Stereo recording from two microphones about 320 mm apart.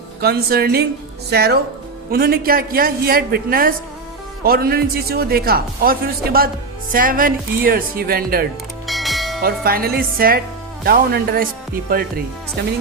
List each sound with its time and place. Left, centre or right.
0.2 s a man's voice: right
8.9 s music: centre
9.4 s a man's voice: right